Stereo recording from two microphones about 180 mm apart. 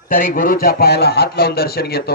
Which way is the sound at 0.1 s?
50° left (ahead or behind).